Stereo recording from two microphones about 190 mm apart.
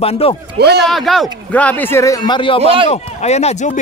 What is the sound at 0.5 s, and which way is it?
Speech, 60° right (ahead or behind).